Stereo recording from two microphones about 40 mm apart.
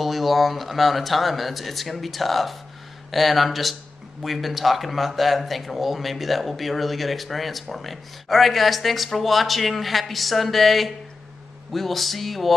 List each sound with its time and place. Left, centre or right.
0.0 s speech: centre